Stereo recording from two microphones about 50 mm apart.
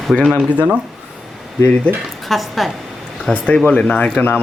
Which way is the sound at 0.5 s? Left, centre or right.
Right.